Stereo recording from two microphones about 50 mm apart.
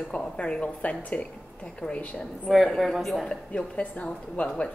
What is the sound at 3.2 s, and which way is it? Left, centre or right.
A woman's voice, left.